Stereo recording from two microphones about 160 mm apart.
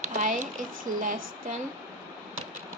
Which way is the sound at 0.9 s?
55° right (ahead or behind).